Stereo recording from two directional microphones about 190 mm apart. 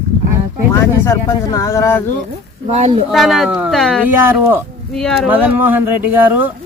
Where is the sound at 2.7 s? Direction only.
35° right (ahead or behind).